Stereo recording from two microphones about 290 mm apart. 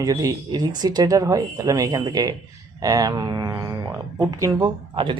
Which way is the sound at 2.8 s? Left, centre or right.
Centre.